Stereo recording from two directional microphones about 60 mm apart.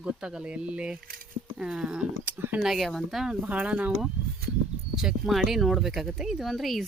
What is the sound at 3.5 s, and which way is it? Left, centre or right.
Speech, right.